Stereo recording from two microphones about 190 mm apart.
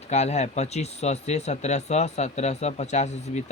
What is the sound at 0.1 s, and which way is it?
Speech, 35° left (ahead or behind).